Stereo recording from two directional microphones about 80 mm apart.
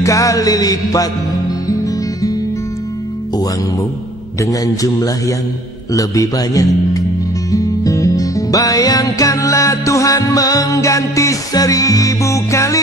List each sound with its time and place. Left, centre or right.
0.0 s music: left
4.4 s music: left